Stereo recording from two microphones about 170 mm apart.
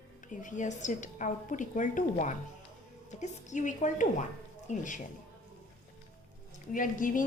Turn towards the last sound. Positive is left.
turn(degrees=50)  # may be behind; listen again after turning